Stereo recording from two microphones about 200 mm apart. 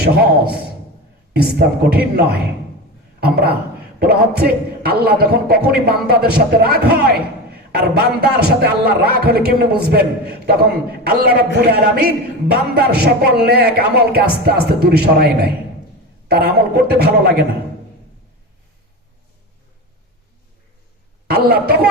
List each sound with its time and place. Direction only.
0.0 s a man's voice: 50° right (ahead or behind)
21.2 s a man's voice: 50° right (ahead or behind)